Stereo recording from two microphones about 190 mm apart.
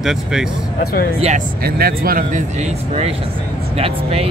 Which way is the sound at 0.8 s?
55° left (ahead or behind).